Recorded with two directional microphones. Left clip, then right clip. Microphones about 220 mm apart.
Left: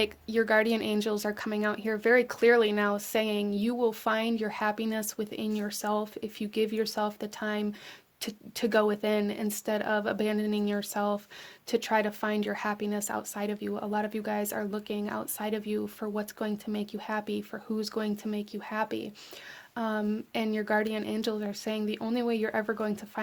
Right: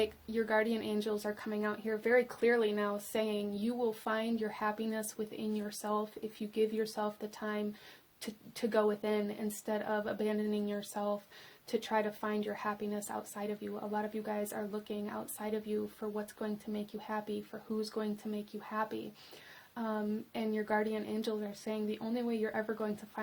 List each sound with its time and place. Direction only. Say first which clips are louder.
0.0 s speech: left 6 dB; 40° left (ahead or behind)